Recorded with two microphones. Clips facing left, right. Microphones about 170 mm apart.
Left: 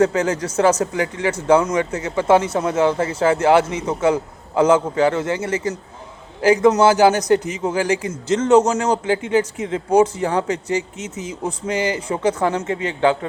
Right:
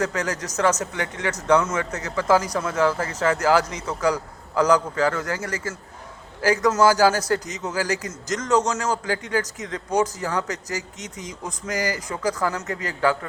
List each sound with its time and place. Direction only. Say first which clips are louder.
0.0 s a man's voice: left 8 dB; 30° left (ahead or behind)